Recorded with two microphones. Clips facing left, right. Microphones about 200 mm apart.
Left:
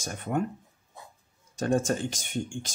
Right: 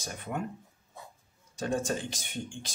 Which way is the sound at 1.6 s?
45° left (ahead or behind).